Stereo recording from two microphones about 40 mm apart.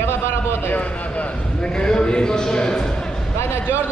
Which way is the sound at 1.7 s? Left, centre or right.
Left.